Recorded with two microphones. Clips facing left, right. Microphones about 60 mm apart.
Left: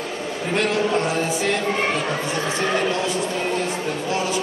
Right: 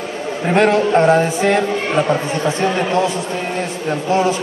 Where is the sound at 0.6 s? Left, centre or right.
Right.